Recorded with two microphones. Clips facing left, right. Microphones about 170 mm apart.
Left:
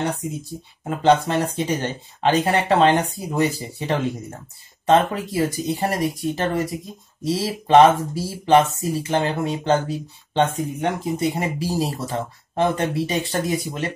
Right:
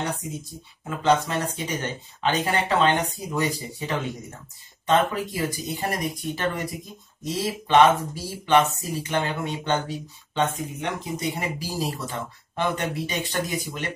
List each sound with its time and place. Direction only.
0.8 s speech: 30° left (ahead or behind)